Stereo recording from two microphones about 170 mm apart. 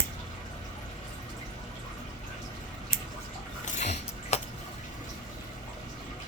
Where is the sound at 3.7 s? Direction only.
40° left (ahead or behind).